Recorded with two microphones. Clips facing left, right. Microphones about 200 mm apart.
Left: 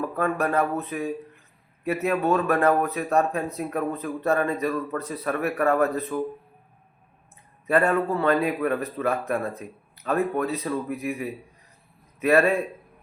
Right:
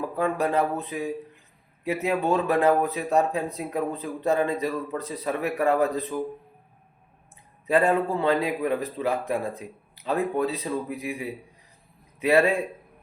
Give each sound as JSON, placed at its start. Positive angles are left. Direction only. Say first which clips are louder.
{"t": 0.0, "sound": "a man's voice", "louder": "even", "side_deg": -15}
{"t": 7.7, "sound": "a man's voice", "louder": "even", "side_deg": -15}